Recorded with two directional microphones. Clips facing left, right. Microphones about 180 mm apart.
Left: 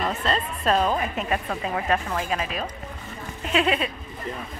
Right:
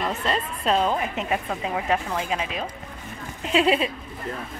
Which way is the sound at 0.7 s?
20° right (ahead or behind).